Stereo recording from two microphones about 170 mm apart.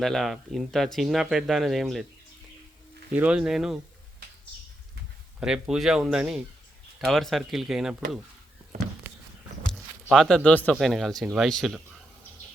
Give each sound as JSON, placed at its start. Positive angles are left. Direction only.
{"t": 0.0, "sound": "speech", "side_deg": 0}
{"t": 3.2, "sound": "speech", "side_deg": -5}
{"t": 5.4, "sound": "speech", "side_deg": -5}
{"t": 9.7, "sound": "speech", "side_deg": 0}